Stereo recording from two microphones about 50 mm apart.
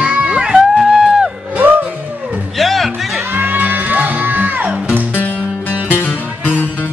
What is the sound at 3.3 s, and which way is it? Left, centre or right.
Music, right.